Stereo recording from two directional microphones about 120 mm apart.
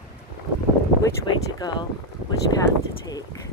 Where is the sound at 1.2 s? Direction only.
40° left (ahead or behind).